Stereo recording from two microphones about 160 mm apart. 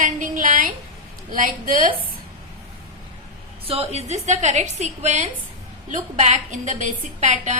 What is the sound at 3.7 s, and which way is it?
A woman's voice, 40° right (ahead or behind).